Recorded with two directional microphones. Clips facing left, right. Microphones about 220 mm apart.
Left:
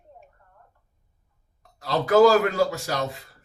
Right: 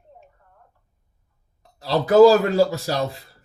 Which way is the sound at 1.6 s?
30° right (ahead or behind).